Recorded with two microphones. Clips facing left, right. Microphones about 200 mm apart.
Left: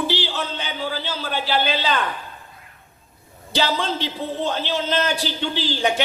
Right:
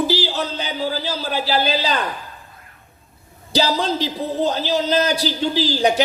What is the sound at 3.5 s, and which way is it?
Speech, 40° right (ahead or behind).